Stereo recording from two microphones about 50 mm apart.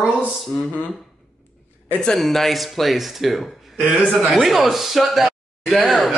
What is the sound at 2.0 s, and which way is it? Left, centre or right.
Speech, centre.